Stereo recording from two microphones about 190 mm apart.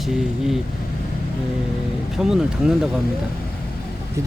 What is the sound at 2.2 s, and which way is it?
Speech, centre (ahead or behind).